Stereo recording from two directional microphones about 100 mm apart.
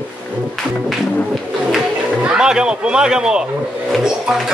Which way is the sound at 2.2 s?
10° right (ahead or behind).